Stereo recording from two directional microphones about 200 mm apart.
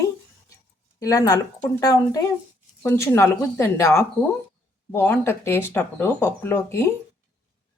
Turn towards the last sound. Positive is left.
turn(degrees=10)  # may be behind; listen again after turning